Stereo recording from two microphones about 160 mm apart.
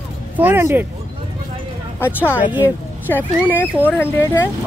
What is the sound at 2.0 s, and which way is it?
Speech, 10° left (ahead or behind).